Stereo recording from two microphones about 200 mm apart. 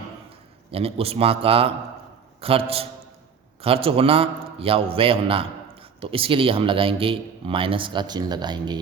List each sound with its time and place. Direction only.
0.7 s a man's voice: 30° right (ahead or behind)